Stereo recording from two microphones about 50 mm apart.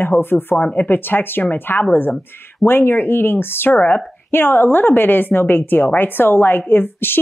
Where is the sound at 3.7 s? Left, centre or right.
Left.